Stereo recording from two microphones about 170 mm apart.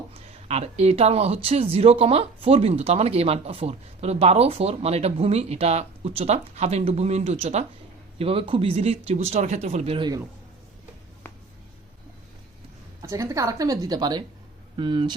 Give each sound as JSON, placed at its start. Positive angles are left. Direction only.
{"t": 0.1, "sound": "speech", "side_deg": -40}
{"t": 13.0, "sound": "a woman's voice", "side_deg": -20}